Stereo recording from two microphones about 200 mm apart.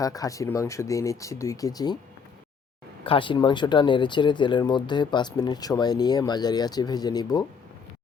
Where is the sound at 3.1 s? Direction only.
25° left (ahead or behind).